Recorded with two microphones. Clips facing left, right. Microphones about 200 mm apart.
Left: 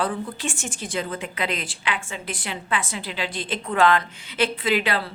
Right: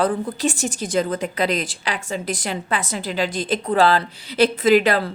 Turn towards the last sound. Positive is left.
turn(degrees=-45)  # may be behind; listen again after turning